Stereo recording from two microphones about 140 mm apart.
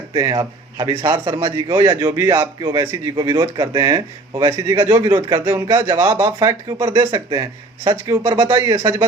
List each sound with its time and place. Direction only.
0.1 s a man's voice: 25° right (ahead or behind)